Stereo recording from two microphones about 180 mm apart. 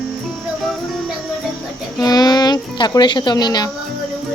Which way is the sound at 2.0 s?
20° left (ahead or behind).